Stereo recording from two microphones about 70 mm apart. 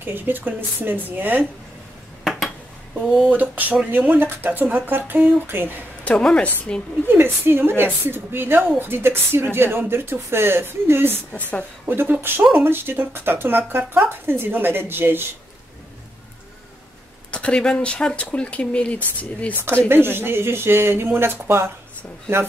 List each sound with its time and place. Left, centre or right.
0.0 s speech: right
2.9 s speech: centre
6.0 s speech: centre
7.1 s a woman's voice: right
17.3 s speech: centre
19.9 s a woman's voice: right